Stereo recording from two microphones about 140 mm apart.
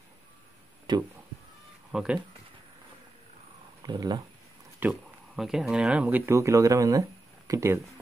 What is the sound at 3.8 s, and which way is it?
Speech, 30° right (ahead or behind).